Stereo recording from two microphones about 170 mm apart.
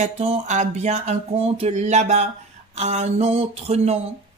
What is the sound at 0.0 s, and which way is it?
Speech, 40° right (ahead or behind).